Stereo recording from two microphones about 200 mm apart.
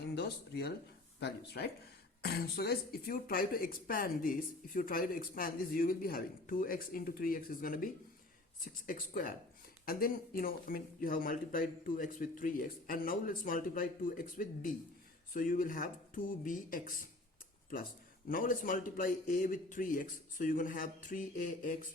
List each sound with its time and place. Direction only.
0.1 s speech: 55° left (ahead or behind)
8.9 s speech: 45° left (ahead or behind)
18.3 s speech: 45° left (ahead or behind)